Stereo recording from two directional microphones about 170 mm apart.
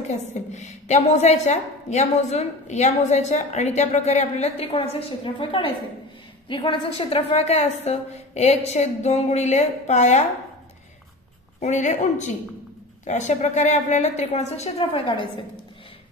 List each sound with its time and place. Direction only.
0.1 s a woman's voice: 45° left (ahead or behind)
11.6 s a woman's voice: 45° left (ahead or behind)